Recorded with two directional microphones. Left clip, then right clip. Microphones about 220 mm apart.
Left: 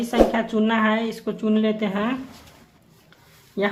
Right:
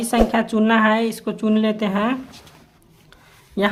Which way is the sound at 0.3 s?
30° right (ahead or behind).